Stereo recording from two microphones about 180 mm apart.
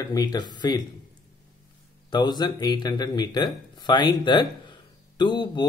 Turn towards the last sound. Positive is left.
turn(degrees=25)  # may be behind; listen again after turning